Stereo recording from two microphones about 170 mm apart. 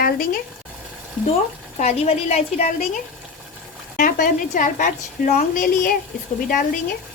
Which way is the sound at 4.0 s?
50° left (ahead or behind).